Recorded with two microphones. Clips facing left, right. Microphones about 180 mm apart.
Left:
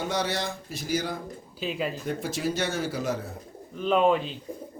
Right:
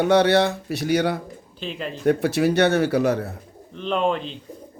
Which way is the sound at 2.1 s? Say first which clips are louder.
Right 16 dB; 70° right (ahead or behind).